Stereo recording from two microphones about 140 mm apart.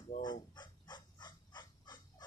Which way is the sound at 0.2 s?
30° left (ahead or behind).